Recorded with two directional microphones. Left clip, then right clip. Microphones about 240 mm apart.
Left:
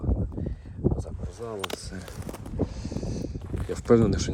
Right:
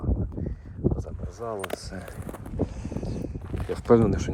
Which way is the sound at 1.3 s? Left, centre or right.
Centre.